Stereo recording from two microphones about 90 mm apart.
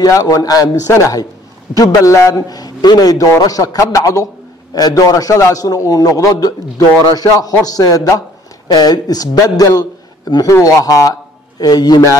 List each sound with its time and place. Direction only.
0.0 s a man's voice: 40° left (ahead or behind)